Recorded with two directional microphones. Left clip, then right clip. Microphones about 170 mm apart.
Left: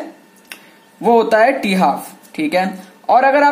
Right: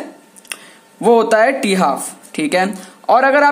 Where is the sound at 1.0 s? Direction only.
40° right (ahead or behind).